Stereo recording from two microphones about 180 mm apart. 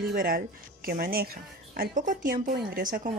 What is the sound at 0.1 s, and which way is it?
Speech, 55° right (ahead or behind).